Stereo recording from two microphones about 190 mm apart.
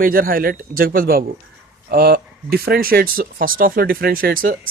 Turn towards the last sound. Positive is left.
turn(degrees=-50)  # may be behind; listen again after turning